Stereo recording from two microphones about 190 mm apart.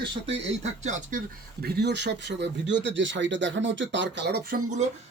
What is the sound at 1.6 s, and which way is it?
Speech, 60° right (ahead or behind).